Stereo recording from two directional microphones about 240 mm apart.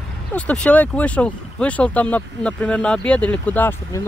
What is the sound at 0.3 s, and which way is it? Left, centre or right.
Speech, centre.